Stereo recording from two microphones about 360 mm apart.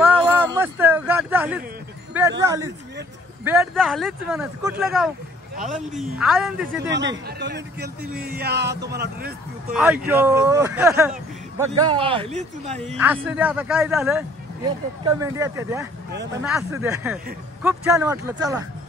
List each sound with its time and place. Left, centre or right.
0.0 s a sound: centre
2.4 s speech: centre
6.9 s a man's voice: right
9.8 s speech: centre
12.7 s speech: centre
16.1 s a man's voice: right
16.4 s speech: centre